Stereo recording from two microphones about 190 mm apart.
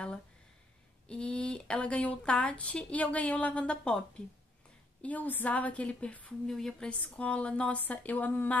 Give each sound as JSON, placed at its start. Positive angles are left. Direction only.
{"t": 1.0, "sound": "speech", "side_deg": 5}
{"t": 5.0, "sound": "a woman's voice", "side_deg": 10}